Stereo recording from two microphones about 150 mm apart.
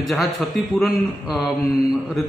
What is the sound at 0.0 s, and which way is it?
A man's voice, centre (ahead or behind).